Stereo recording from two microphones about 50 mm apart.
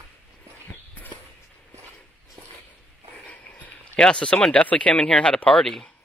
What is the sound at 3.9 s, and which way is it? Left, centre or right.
Speech, centre.